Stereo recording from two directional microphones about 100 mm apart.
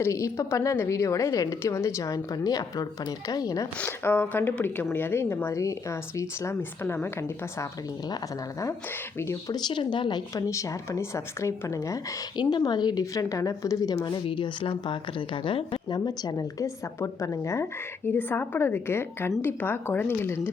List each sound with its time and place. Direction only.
0.0 s a woman's voice: 30° left (ahead or behind)
3.8 s speech: 20° left (ahead or behind)
9.1 s speech: 25° left (ahead or behind)
9.5 s speech: 50° left (ahead or behind)
10.4 s a woman's voice: 30° left (ahead or behind)
12.4 s a woman's voice: 45° left (ahead or behind)
13.9 s speech: 55° left (ahead or behind)
16.0 s speech: 40° left (ahead or behind)